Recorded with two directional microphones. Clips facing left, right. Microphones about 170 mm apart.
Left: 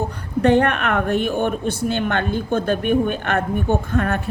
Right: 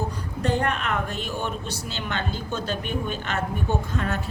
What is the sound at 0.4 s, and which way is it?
A woman's voice, 65° left (ahead or behind).